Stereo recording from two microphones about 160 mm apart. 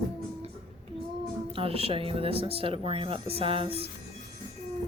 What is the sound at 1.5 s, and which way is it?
Speech, 35° right (ahead or behind).